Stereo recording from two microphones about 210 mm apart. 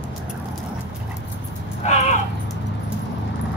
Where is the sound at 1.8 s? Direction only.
30° left (ahead or behind).